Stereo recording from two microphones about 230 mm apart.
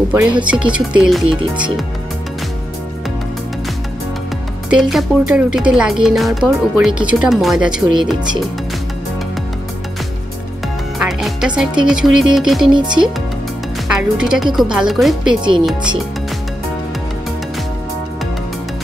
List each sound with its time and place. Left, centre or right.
0.5 s speech: centre
4.6 s speech: centre
11.0 s speech: centre
12.7 s speech: centre
13.8 s speech: centre